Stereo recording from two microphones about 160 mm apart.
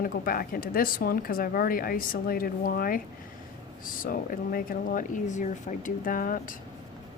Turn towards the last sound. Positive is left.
turn(degrees=60)  # may be behind; listen again after turning